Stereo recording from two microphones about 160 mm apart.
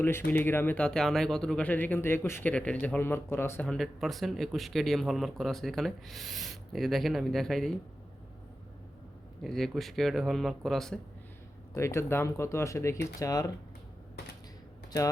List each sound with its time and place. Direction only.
0.3 s speech: 15° left (ahead or behind)
9.4 s speech: centre (ahead or behind)
11.7 s speech: 15° left (ahead or behind)